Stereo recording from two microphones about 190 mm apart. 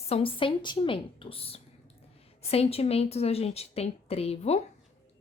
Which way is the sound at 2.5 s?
30° left (ahead or behind).